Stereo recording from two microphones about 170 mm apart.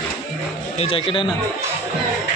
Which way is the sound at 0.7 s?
35° left (ahead or behind).